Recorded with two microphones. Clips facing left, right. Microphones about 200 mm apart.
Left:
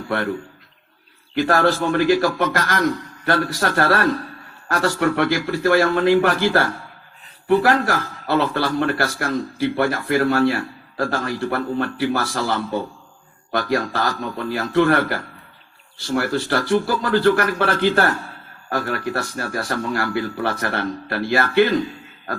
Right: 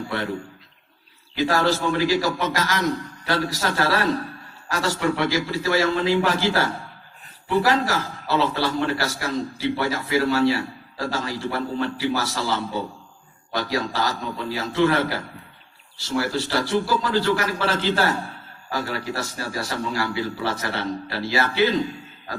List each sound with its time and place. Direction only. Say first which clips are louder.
0.1 s a man's voice: left 6 dB; 55° left (ahead or behind)
1.4 s a man's voice: left 3 dB; 55° left (ahead or behind)